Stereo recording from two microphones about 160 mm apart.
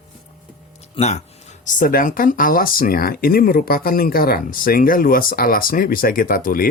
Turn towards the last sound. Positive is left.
turn(degrees=65)  # may be behind; listen again after turning